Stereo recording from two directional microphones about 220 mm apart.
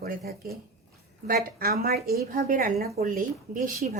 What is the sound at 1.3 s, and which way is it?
Speech, 40° right (ahead or behind).